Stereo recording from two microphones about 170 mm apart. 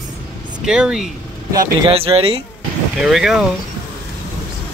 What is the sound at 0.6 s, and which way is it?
Speech, 5° right (ahead or behind).